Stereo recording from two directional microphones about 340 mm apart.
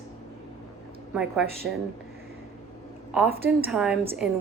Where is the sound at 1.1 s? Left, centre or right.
Centre.